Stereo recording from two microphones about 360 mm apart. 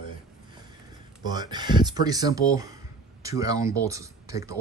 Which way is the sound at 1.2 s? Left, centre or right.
Centre.